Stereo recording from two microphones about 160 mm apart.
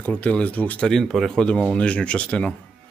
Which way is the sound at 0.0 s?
10° left (ahead or behind).